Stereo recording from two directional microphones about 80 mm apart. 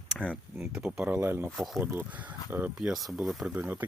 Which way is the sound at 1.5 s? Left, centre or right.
Centre.